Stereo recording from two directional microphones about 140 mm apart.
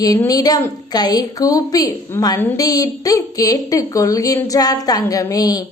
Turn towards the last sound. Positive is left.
turn(degrees=25)  # may be behind; listen again after turning